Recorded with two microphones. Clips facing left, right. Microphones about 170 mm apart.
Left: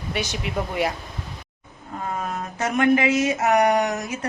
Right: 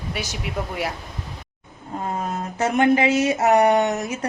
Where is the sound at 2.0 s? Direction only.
30° right (ahead or behind).